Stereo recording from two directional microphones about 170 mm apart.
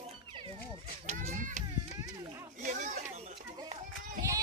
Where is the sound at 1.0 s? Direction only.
45° right (ahead or behind).